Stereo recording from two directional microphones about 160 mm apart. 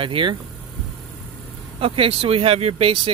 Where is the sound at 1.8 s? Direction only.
35° right (ahead or behind).